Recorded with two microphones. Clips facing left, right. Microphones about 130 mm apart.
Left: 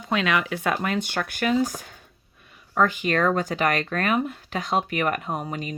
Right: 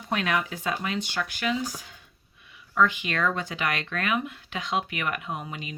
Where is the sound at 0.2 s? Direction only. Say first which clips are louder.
Left 4 dB; 90° left.